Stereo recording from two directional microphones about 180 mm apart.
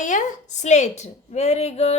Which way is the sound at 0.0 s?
45° left (ahead or behind).